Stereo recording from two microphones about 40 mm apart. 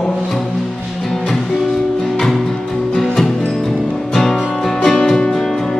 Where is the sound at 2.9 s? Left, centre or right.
Centre.